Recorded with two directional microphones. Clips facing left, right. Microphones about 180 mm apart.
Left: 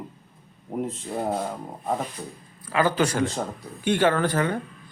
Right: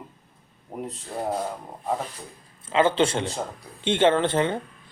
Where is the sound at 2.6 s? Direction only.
25° right (ahead or behind).